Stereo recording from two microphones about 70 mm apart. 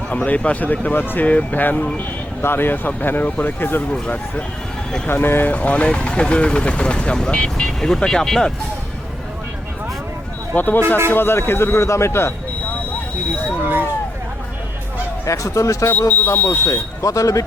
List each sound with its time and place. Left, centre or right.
0.3 s speech: left
5.0 s speech: left; by 8.5 s centre
10.5 s speech: left
10.8 s speech: right
11.1 s speech: left
13.6 s speech: right
15.3 s speech: left
15.9 s speech: left
16.7 s speech: left